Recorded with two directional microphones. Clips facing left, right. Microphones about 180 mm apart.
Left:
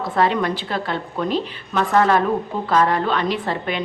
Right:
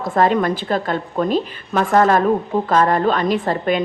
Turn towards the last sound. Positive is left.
turn(degrees=-45)  # may be behind; listen again after turning